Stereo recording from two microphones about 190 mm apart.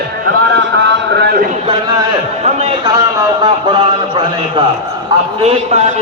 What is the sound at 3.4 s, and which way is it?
Speech, 25° right (ahead or behind).